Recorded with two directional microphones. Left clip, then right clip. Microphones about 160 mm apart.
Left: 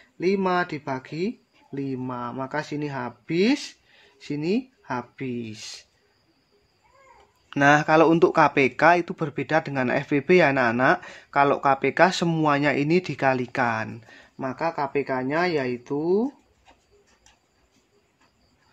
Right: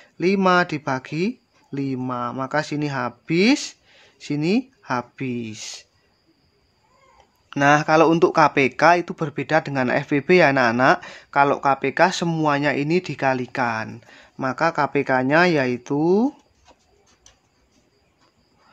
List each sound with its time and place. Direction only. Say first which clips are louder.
0.0 s speech: right 4 dB; 40° right (ahead or behind); by 5.9 s 25° right (ahead or behind)
7.4 s speech: right 1 dB; 5° right (ahead or behind)
14.4 s speech: right 6 dB; 40° right (ahead or behind); by 16.3 s 60° right (ahead or behind)